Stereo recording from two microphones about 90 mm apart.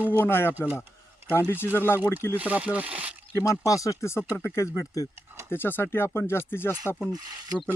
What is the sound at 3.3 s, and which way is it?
Speech, 35° left (ahead or behind).